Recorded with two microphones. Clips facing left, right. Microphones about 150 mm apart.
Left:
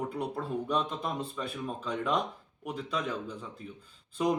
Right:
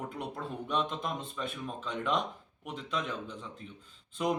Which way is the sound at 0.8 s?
35° left (ahead or behind).